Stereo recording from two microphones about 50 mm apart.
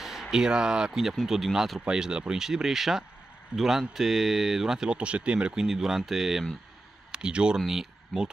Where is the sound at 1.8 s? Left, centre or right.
Centre.